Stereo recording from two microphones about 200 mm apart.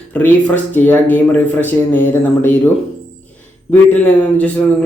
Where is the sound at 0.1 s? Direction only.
5° left (ahead or behind).